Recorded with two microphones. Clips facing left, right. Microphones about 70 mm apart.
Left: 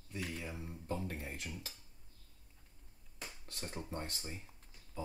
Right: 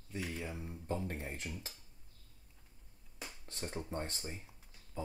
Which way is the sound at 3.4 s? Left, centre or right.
Right.